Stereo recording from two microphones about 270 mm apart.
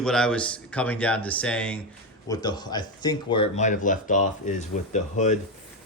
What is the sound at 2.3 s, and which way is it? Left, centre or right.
Speech, centre.